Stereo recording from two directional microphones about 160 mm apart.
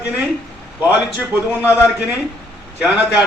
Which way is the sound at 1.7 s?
10° right (ahead or behind).